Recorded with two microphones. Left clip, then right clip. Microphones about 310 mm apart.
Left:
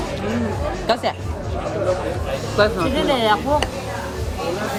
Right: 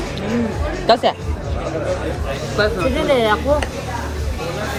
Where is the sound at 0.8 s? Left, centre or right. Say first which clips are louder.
Right 7 dB; centre.